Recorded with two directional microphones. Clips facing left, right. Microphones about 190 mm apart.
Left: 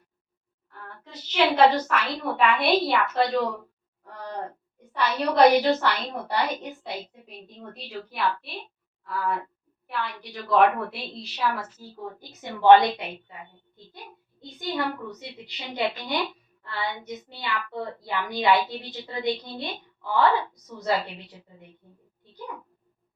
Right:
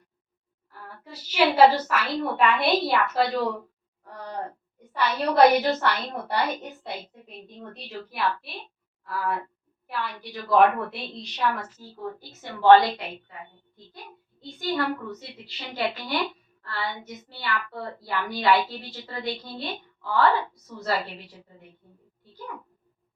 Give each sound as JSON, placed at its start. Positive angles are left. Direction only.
{"t": 0.7, "sound": "a woman's voice", "side_deg": -5}
{"t": 4.9, "sound": "a woman's voice", "side_deg": 0}
{"t": 12.2, "sound": "a woman's voice", "side_deg": 20}
{"t": 14.4, "sound": "a woman's voice", "side_deg": 20}